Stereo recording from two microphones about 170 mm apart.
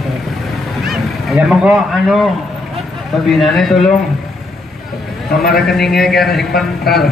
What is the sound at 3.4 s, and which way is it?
Speech, centre (ahead or behind).